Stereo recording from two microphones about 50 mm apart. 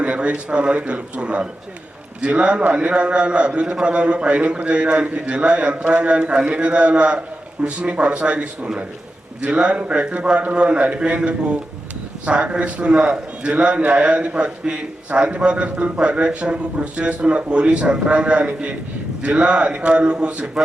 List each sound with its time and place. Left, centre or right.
0.0 s a man's voice: right